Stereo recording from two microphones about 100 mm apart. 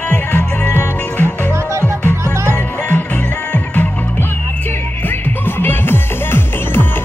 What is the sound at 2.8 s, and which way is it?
Music, 15° left (ahead or behind).